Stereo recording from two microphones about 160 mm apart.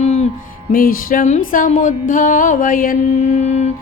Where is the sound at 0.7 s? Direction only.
60° left (ahead or behind); by 3.7 s 45° left (ahead or behind).